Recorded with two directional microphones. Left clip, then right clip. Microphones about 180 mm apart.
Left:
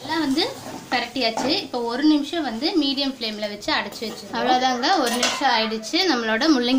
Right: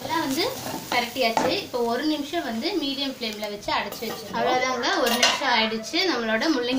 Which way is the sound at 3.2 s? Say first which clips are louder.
Left 3 dB; 45° left (ahead or behind).